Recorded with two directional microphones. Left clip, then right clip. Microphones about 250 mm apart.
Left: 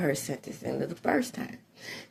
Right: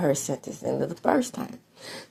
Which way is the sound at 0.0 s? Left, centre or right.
Centre.